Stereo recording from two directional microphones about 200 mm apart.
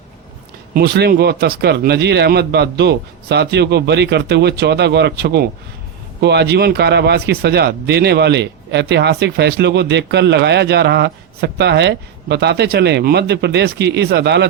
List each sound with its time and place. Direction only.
0.7 s speech: 50° right (ahead or behind)